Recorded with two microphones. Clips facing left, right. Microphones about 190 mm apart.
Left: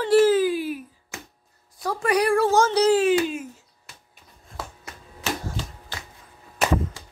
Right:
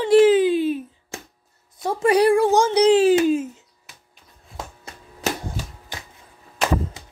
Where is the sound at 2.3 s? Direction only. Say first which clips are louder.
Right 2 dB; 15° right (ahead or behind).